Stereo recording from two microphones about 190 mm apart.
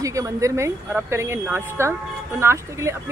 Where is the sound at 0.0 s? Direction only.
15° right (ahead or behind).